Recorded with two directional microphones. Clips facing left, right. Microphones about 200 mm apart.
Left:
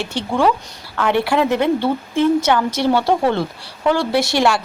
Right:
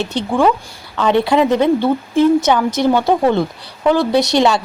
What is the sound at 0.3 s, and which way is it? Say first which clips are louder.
A woman's voice: right 2 dB; 15° right (ahead or behind).